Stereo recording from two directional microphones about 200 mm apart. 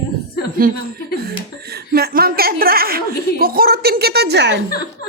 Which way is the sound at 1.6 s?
50° right (ahead or behind).